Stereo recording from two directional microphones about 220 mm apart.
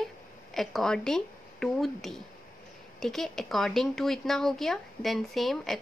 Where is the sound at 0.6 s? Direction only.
Centre (ahead or behind).